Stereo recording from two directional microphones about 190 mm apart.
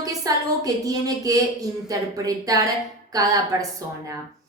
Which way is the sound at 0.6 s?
20° right (ahead or behind).